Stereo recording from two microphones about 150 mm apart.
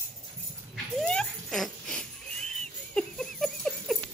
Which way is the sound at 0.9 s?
5° left (ahead or behind).